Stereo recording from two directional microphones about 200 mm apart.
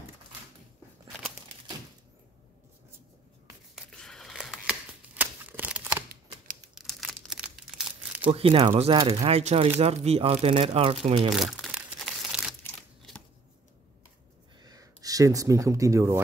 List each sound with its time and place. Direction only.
3.7 s a sound: 5° left (ahead or behind)
6.7 s crumpling: centre (ahead or behind)
8.3 s speech: 30° right (ahead or behind)
11.3 s crumpling: centre (ahead or behind)
14.6 s speech: 20° right (ahead or behind)